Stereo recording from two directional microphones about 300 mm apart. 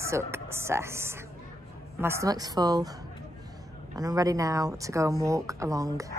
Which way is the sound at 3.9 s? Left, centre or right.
Centre.